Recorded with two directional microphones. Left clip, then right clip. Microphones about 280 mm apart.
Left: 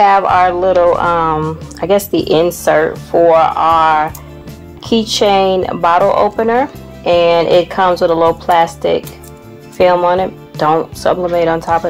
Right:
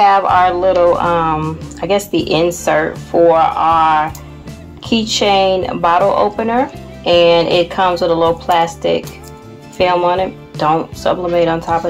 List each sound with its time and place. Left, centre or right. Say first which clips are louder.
0.0 s speech: left 1 dB; left
3.1 s speech: left 1 dB; left